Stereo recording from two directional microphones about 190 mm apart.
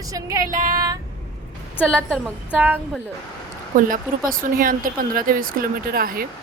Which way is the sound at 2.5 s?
10° right (ahead or behind).